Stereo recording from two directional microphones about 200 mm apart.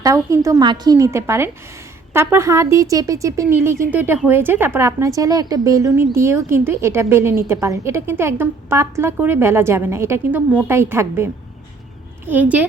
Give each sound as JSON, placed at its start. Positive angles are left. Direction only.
{"t": 0.0, "sound": "a woman's voice", "side_deg": -15}